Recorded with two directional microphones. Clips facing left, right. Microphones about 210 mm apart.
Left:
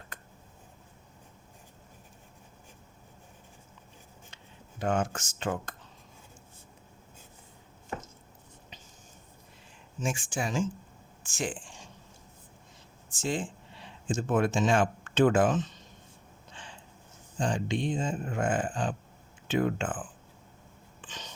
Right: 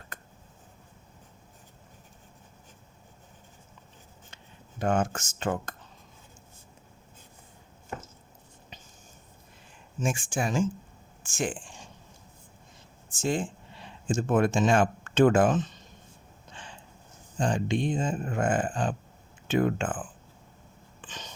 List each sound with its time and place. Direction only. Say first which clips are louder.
4.8 s speech: right 2 dB; 45° right (ahead or behind)
10.0 s speech: right 3 dB; 50° right (ahead or behind)
13.1 s speech: right 3 dB; 45° right (ahead or behind)
17.4 s speech: right 3 dB; 50° right (ahead or behind)